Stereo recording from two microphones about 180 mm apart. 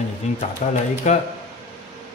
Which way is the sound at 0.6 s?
45° left (ahead or behind).